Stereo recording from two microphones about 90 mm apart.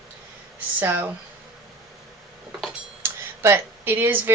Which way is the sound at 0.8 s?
20° right (ahead or behind).